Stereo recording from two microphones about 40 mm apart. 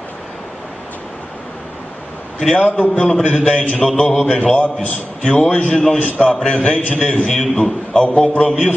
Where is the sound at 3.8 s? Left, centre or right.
Centre.